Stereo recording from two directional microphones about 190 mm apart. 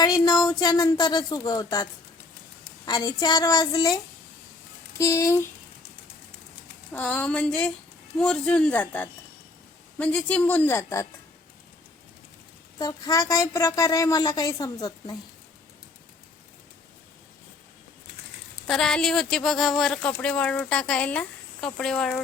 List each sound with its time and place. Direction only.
0.0 s a woman's voice: 20° left (ahead or behind)
6.9 s a woman's voice: 5° left (ahead or behind)
12.8 s a woman's voice: 20° left (ahead or behind)
18.7 s speech: 5° left (ahead or behind)